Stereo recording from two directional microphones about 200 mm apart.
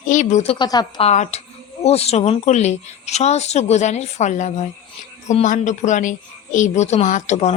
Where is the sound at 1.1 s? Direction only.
35° left (ahead or behind).